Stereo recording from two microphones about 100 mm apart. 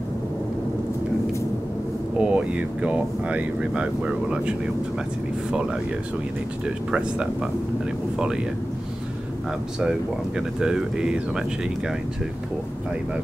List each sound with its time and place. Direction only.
2.1 s speech: 10° right (ahead or behind)
6.9 s speech: 10° right (ahead or behind)
9.8 s speech: 10° right (ahead or behind)